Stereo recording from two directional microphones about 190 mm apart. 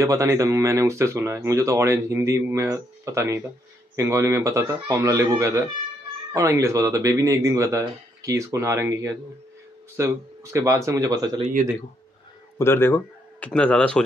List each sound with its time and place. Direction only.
0.0 s speech: 15° right (ahead or behind)
12.5 s speech: 10° left (ahead or behind)